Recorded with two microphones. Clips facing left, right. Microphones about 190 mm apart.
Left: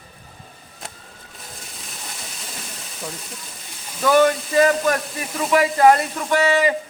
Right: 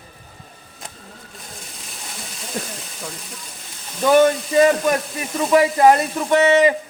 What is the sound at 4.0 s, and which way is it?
Speech, 20° right (ahead or behind).